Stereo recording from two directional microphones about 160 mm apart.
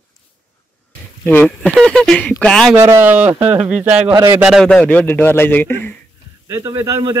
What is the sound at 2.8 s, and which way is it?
Speech, 15° right (ahead or behind).